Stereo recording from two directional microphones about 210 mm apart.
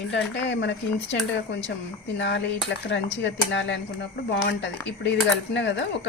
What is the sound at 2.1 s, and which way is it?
A woman's voice, 55° left (ahead or behind).